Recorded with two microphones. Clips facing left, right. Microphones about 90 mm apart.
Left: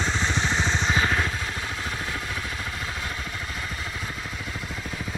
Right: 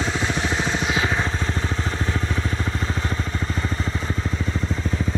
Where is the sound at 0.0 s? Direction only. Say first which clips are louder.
Right 2 dB; 5° right (ahead or behind).